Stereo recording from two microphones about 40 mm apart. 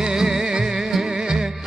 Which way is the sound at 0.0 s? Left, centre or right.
Centre.